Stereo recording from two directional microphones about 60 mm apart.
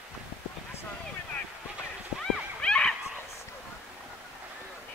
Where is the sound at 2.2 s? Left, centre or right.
Centre.